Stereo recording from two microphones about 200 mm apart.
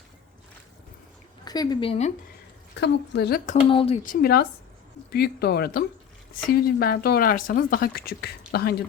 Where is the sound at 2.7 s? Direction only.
60° left (ahead or behind).